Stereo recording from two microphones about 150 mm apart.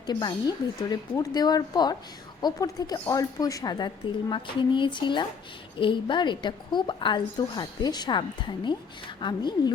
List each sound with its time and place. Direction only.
0.0 s a woman's voice: 30° left (ahead or behind)